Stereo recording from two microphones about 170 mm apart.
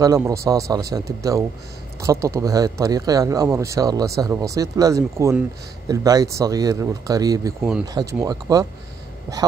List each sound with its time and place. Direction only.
0.0 s speech: 20° right (ahead or behind)